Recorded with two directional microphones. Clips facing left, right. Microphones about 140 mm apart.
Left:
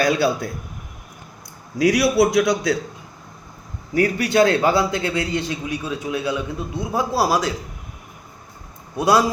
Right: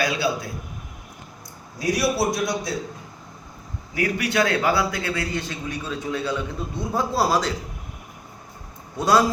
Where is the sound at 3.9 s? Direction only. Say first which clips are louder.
Left 6 dB; 35° left (ahead or behind); by 7.5 s 10° left (ahead or behind).